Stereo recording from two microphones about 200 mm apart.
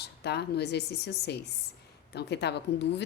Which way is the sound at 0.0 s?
55° left (ahead or behind).